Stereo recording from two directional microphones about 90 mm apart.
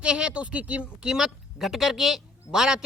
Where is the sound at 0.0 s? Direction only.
10° right (ahead or behind).